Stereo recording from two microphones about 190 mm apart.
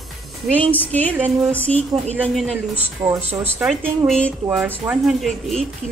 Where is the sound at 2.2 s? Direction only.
Centre (ahead or behind).